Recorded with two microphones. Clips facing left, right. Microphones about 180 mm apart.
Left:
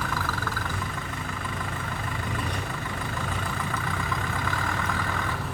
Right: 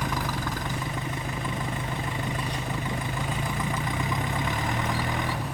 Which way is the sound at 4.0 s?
20° right (ahead or behind).